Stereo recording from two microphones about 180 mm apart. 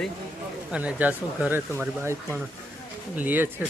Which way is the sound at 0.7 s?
5° right (ahead or behind).